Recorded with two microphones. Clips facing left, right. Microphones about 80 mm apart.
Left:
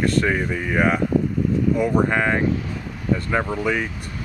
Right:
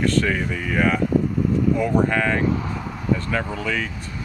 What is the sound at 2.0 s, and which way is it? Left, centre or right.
Speech, left.